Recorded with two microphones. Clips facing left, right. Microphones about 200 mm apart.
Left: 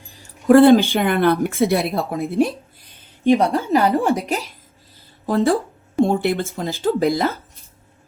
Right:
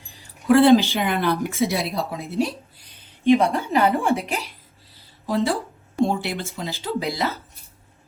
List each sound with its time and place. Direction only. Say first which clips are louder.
0.2 s speech: left 5 dB; 50° left (ahead or behind)
4.9 s a sound: left 4 dB; 55° left (ahead or behind)
6.0 s a woman's voice: left 5 dB; 55° left (ahead or behind)